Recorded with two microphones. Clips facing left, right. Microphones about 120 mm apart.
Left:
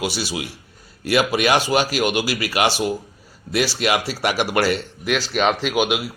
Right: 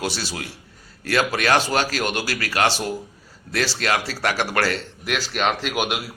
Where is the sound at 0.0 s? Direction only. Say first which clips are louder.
Left 3 dB; 10° left (ahead or behind).